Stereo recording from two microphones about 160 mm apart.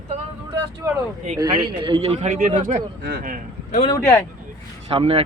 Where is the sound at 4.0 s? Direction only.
15° left (ahead or behind).